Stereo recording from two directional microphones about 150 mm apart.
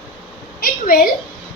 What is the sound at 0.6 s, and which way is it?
Speech, 70° left (ahead or behind).